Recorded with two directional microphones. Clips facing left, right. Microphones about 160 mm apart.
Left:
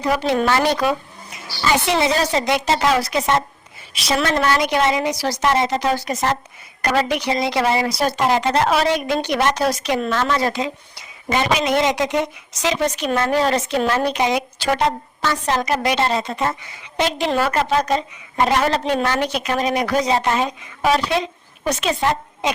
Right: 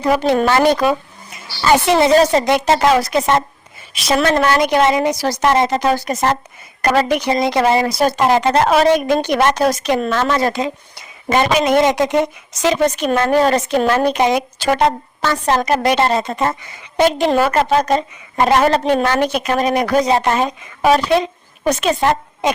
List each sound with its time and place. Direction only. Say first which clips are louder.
0.0 s speech: right 4 dB; 50° right (ahead or behind)